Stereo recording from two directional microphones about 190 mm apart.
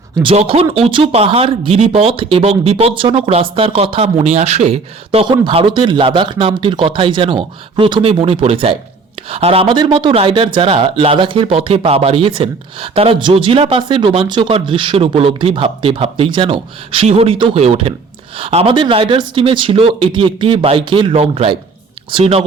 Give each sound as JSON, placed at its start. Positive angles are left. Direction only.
{"t": 0.2, "sound": "speech", "side_deg": -30}